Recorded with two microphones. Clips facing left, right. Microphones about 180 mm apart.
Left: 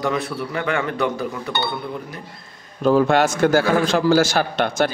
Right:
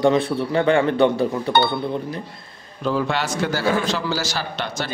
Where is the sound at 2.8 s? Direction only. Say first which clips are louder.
Left 7 dB; 50° left (ahead or behind).